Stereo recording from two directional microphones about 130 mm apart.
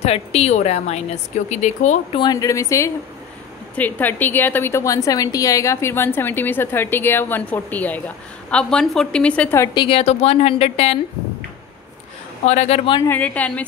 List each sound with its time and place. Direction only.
0.0 s a woman's voice: 50° left (ahead or behind)
2.1 s speech: 30° left (ahead or behind)
3.7 s a woman's voice: 15° left (ahead or behind)
9.8 s speech: 45° left (ahead or behind)
12.4 s a woman's voice: 55° left (ahead or behind)
13.0 s a woman's voice: 15° left (ahead or behind)